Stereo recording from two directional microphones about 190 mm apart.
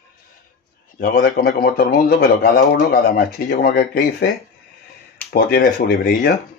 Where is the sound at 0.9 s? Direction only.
50° left (ahead or behind).